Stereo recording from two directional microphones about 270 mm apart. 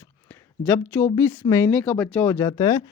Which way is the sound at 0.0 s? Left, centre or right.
Centre.